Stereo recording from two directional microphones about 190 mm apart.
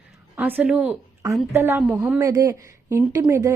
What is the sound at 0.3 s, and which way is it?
A woman's voice, 10° right (ahead or behind).